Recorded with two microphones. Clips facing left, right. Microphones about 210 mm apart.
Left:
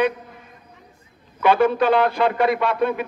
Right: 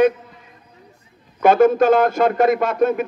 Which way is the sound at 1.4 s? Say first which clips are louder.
Right 4 dB; 45° right (ahead or behind).